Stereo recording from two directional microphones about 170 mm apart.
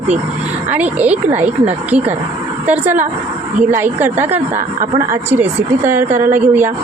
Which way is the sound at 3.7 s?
10° right (ahead or behind).